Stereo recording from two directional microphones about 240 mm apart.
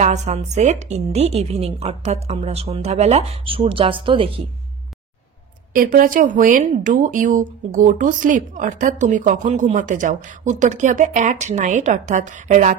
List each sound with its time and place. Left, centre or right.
0.0 s a woman's voice: right
5.8 s speech: right